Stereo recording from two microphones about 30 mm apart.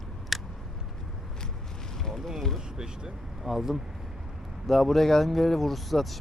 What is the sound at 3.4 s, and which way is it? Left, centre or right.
Speech, centre.